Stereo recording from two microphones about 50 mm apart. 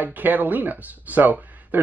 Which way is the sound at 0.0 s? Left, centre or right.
Right.